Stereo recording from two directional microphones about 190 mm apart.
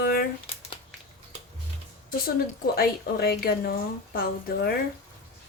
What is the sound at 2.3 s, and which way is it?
Speech, 55° left (ahead or behind).